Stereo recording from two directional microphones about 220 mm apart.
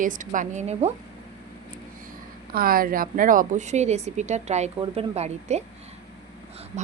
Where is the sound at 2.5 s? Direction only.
40° right (ahead or behind).